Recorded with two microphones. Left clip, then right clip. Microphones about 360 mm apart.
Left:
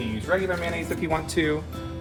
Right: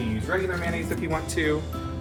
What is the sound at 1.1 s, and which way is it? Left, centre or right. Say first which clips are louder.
Speech: left 2 dB; left.